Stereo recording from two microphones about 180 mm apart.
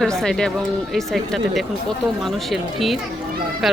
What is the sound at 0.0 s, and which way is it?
Speech, 5° left (ahead or behind).